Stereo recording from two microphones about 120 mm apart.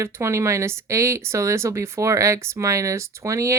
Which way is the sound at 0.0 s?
25° right (ahead or behind).